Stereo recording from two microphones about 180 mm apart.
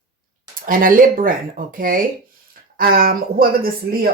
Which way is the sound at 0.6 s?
50° right (ahead or behind).